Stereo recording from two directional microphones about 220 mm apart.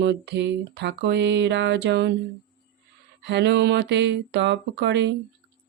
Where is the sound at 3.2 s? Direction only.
50° right (ahead or behind).